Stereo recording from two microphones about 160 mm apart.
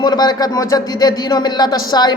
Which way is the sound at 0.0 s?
25° left (ahead or behind).